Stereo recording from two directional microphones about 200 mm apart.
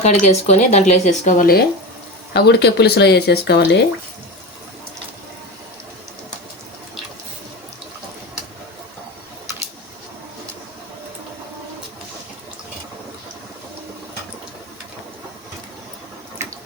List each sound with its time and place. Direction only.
0.0 s speech: 35° left (ahead or behind); by 3.8 s 60° left (ahead or behind)